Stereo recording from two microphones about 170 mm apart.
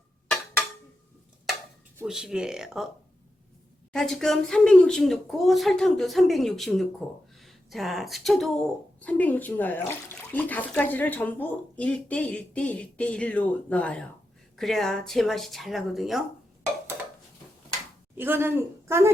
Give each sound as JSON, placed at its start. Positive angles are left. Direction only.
{"t": 2.0, "sound": "speech", "side_deg": -5}
{"t": 3.9, "sound": "speech", "side_deg": 0}
{"t": 18.2, "sound": "speech", "side_deg": -15}